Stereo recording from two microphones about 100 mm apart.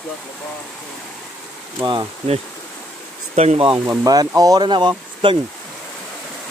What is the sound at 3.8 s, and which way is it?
Speech, 40° right (ahead or behind).